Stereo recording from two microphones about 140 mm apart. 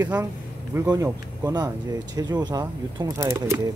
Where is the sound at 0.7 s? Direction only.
20° right (ahead or behind).